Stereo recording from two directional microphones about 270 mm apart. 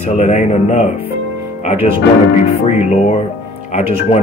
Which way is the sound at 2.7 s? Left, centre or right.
Left.